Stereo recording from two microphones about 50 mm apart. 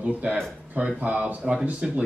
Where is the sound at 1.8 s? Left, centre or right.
Centre.